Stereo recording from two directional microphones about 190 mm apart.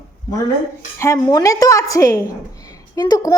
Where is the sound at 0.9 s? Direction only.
15° left (ahead or behind).